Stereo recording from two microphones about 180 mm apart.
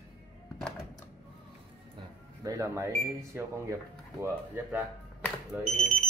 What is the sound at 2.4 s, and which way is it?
Speech, 15° right (ahead or behind).